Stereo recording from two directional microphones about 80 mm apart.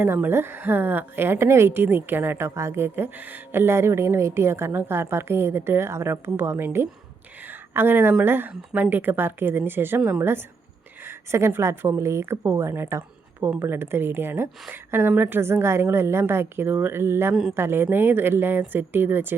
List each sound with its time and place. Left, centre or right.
0.0 s a woman's voice: right